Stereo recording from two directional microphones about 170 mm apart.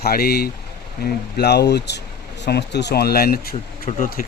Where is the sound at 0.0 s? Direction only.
65° left (ahead or behind).